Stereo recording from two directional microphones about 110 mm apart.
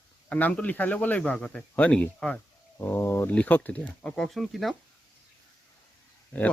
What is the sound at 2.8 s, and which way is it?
Speech, 20° left (ahead or behind).